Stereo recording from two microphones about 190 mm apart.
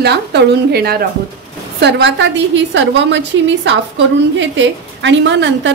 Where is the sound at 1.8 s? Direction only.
70° right (ahead or behind).